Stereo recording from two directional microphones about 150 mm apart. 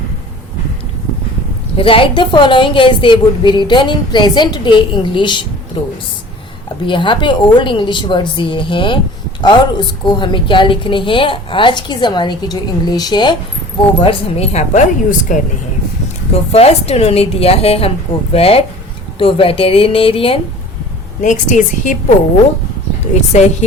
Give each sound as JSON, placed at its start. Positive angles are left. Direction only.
{"t": 1.8, "sound": "a woman's voice", "side_deg": 35}
{"t": 14.0, "sound": "a woman's voice", "side_deg": 40}
{"t": 16.5, "sound": "a woman's voice", "side_deg": 45}
{"t": 21.2, "sound": "a woman's voice", "side_deg": 55}
{"t": 23.3, "sound": "a woman's voice", "side_deg": 50}